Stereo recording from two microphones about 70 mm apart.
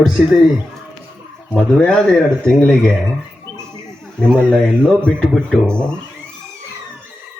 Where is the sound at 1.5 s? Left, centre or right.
Centre.